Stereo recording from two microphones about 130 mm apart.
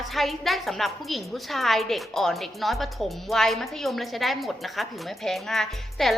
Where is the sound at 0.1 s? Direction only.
Centre (ahead or behind).